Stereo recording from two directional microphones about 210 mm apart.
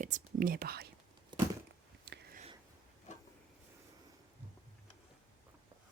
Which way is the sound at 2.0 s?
50° right (ahead or behind).